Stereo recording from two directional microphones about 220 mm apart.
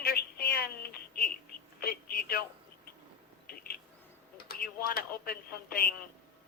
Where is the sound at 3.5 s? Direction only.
45° left (ahead or behind).